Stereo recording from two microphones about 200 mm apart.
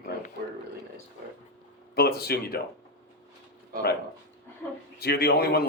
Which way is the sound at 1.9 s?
50° left (ahead or behind).